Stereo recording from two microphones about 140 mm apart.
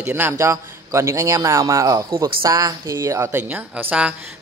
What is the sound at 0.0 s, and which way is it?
A man's voice, 15° right (ahead or behind).